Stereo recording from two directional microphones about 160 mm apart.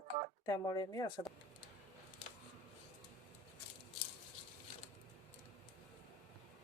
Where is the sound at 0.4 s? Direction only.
25° left (ahead or behind).